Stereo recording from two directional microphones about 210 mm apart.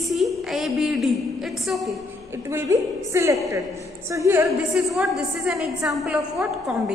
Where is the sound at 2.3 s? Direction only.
10° right (ahead or behind).